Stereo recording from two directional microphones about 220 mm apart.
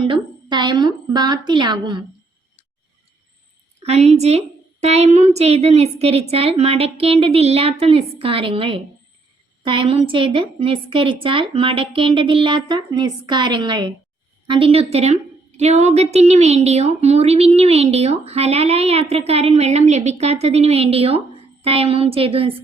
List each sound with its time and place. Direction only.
0.0 s a woman's voice: 20° right (ahead or behind)
3.8 s a woman's voice: 30° right (ahead or behind)